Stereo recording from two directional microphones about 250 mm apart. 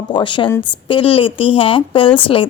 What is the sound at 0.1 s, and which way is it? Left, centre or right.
Speech, centre.